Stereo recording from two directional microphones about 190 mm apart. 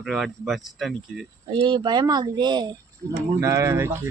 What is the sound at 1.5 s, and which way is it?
Speech, 25° right (ahead or behind).